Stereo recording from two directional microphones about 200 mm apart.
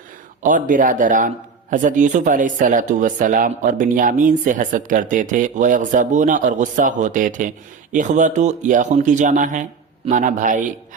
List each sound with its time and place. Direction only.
0.4 s speech: 40° right (ahead or behind)